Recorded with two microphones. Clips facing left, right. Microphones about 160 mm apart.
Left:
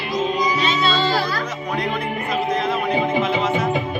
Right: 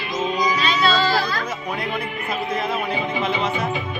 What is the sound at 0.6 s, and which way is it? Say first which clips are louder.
Child singing: even; 25° left (ahead or behind).